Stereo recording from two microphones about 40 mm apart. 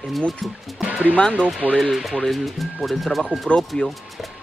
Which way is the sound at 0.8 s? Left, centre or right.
Right.